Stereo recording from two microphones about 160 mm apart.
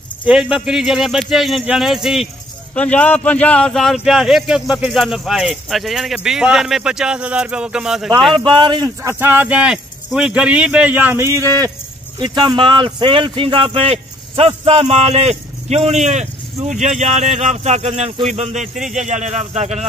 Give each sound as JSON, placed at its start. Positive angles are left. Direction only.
{"t": 0.2, "sound": "a man's voice", "side_deg": -5}
{"t": 8.5, "sound": "speech", "side_deg": -30}
{"t": 9.2, "sound": "a man's voice", "side_deg": -10}